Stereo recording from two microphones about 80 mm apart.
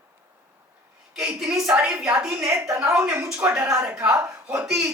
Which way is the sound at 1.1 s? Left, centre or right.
Centre.